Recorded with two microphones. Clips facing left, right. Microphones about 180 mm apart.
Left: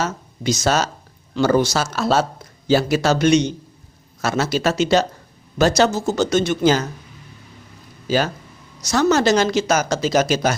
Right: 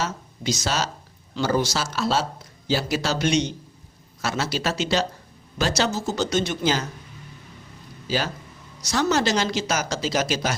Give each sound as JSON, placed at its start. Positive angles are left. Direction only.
{"t": 0.0, "sound": "speech", "side_deg": 50}
{"t": 8.8, "sound": "speech", "side_deg": 45}